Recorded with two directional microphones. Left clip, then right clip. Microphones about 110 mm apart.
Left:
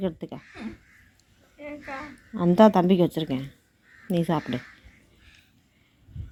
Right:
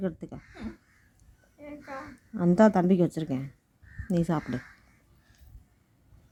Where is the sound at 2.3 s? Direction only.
15° right (ahead or behind).